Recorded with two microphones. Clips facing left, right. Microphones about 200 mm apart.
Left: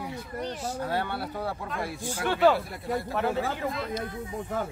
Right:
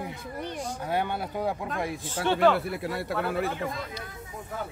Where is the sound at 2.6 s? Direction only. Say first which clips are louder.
Even; 80° right.